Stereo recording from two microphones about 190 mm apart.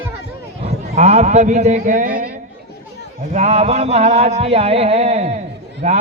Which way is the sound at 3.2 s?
35° right (ahead or behind).